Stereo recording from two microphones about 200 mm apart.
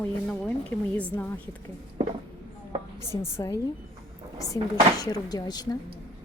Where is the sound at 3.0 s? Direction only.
15° left (ahead or behind).